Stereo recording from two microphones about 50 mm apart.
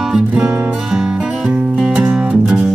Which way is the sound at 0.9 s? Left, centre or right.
Centre.